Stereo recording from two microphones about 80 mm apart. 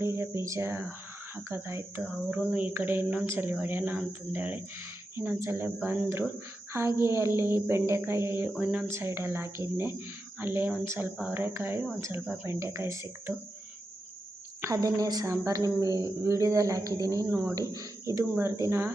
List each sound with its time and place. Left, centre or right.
0.0 s speech: right
2.3 s speech: right
8.5 s speech: centre
8.9 s speech: right
12.2 s speech: centre
12.5 s speech: right
14.7 s speech: right
17.2 s speech: right
17.5 s speech: right